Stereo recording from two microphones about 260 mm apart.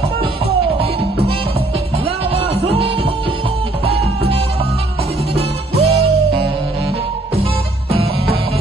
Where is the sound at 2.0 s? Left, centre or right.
Right.